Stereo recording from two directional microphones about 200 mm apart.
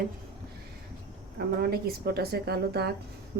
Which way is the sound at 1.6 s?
50° right (ahead or behind).